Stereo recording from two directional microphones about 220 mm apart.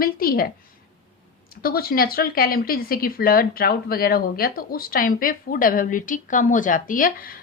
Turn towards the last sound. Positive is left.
turn(degrees=40)  # may be behind; listen again after turning